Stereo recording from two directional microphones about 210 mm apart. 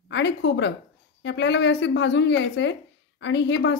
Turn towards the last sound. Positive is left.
turn(degrees=60)  # may be behind; listen again after turning